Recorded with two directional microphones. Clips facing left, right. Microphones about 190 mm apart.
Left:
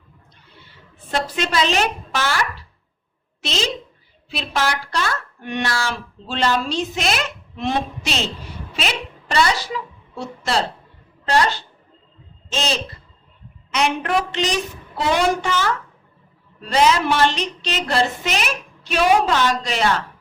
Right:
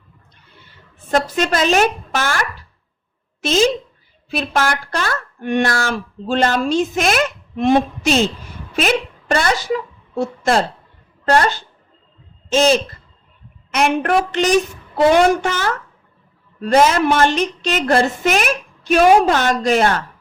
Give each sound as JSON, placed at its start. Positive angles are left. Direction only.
{"t": 1.1, "sound": "a woman's voice", "side_deg": -45}